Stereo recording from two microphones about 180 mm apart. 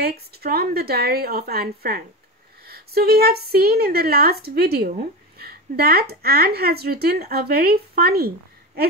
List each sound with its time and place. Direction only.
0.0 s speech: 60° right (ahead or behind)